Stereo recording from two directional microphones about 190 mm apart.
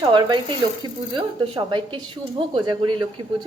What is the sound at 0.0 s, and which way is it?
A woman's voice, 25° right (ahead or behind).